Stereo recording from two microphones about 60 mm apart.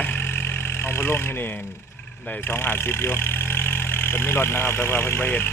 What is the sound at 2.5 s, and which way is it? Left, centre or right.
Speech, left.